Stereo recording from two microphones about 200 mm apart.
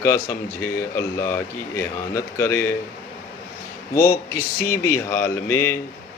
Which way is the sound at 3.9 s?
45° left (ahead or behind).